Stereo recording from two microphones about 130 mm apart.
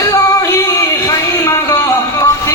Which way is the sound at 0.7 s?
25° left (ahead or behind).